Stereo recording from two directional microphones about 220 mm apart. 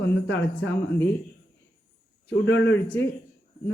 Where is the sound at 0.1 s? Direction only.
60° left (ahead or behind).